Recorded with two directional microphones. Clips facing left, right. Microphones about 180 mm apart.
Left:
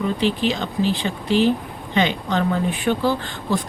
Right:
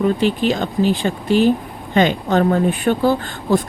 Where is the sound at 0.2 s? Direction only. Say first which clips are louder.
Right 3 dB; 45° right (ahead or behind).